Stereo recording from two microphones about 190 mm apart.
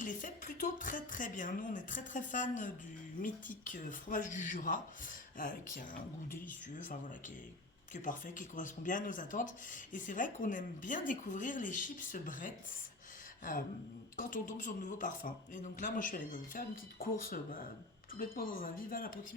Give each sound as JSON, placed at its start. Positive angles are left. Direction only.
{"t": 0.0, "sound": "speech", "side_deg": 45}